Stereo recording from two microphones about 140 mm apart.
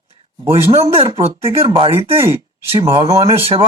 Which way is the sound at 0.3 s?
40° right (ahead or behind).